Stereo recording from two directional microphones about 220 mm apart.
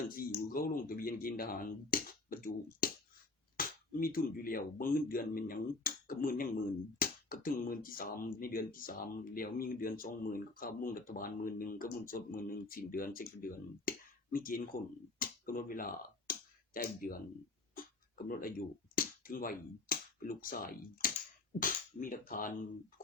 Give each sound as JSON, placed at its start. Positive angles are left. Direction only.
{"t": 0.1, "sound": "speech", "side_deg": 40}
{"t": 15.2, "sound": "finger snapping", "side_deg": 40}
{"t": 18.3, "sound": "speech", "side_deg": 40}